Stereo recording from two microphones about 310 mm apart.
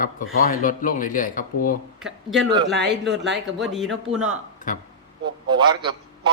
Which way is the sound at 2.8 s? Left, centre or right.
Right.